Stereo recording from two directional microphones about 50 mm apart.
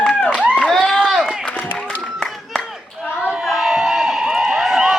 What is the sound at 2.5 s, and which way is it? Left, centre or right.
Clapping, centre.